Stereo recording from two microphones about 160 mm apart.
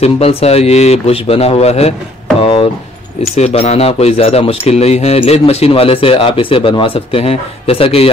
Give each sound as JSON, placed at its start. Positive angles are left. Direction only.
{"t": 0.0, "sound": "speech", "side_deg": 40}
{"t": 3.3, "sound": "speech", "side_deg": 40}